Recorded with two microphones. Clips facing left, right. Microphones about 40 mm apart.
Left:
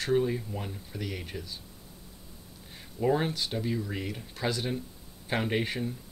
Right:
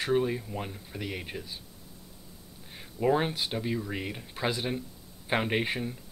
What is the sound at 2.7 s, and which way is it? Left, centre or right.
Speech, centre.